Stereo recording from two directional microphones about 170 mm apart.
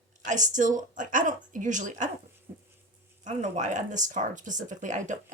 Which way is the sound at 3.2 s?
45° right (ahead or behind).